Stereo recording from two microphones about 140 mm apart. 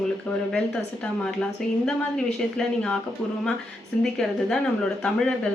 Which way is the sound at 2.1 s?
5° left (ahead or behind).